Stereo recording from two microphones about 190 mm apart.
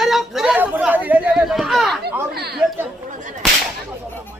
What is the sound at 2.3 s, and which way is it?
Speech, 60° right (ahead or behind).